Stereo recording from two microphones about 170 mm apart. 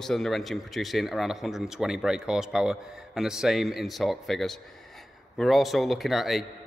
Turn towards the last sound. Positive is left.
turn(degrees=0)  # may be behind; listen again after turning